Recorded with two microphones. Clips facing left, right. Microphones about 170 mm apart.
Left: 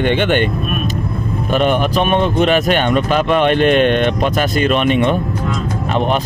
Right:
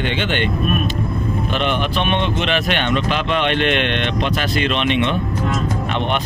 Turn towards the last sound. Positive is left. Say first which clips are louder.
# left 4 dB
turn(degrees=40)  # may be behind; listen again after turning